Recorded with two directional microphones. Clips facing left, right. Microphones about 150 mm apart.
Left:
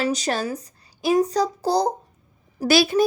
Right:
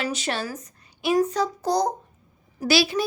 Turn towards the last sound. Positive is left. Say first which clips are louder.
# left 4 dB
turn(degrees=50)  # may be behind; listen again after turning